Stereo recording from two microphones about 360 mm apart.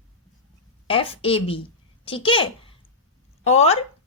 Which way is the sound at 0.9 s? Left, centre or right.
Centre.